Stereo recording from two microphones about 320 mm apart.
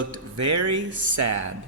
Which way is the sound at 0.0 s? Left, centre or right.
Right.